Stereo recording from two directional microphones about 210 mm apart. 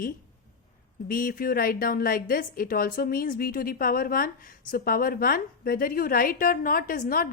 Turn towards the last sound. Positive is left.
turn(degrees=40)  # may be behind; listen again after turning